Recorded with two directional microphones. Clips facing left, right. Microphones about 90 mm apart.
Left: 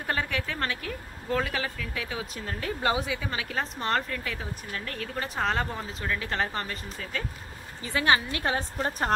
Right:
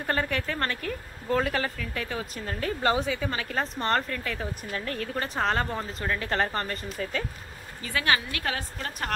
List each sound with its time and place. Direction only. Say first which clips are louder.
0.0 s speech: right 2 dB; centre (ahead or behind)
7.8 s a woman's voice: left 2 dB; 20° left (ahead or behind)